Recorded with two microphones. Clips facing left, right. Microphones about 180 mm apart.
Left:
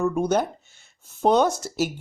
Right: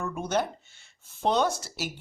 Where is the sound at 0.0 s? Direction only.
40° left (ahead or behind).